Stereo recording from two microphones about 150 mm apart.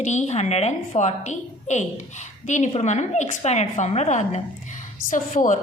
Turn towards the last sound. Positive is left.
turn(degrees=55)  # may be behind; listen again after turning